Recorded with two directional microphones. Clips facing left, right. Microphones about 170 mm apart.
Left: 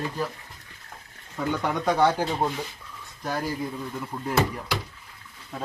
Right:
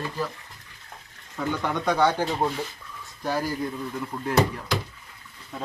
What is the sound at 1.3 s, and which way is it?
A man's voice, 5° left (ahead or behind).